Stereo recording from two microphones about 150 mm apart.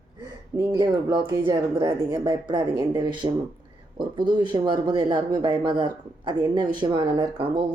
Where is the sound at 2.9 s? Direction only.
30° right (ahead or behind).